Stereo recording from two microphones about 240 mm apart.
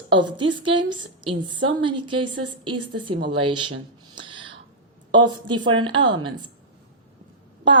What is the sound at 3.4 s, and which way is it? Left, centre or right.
Speech, right.